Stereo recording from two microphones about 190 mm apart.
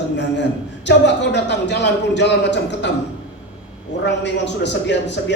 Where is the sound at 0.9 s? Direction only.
65° left (ahead or behind).